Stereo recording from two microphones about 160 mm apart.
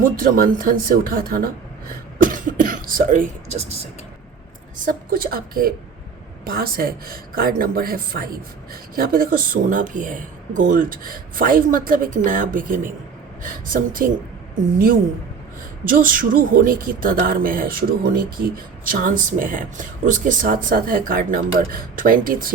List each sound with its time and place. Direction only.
0.0 s speech: 60° right (ahead or behind)
1.9 s cough: 60° right (ahead or behind); by 3.8 s 40° right (ahead or behind)
4.9 s speech: 60° right (ahead or behind)
15.8 s speech: 60° right (ahead or behind)